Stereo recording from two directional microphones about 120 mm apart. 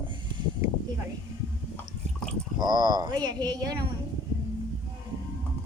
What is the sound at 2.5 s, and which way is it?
Speech, 35° right (ahead or behind).